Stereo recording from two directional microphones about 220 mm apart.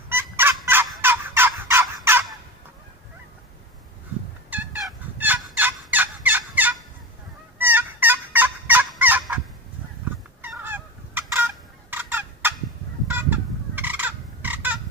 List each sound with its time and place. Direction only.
0.1 s fowl: 10° right (ahead or behind)
4.5 s fowl: 5° right (ahead or behind)
10.4 s fowl: 10° right (ahead or behind)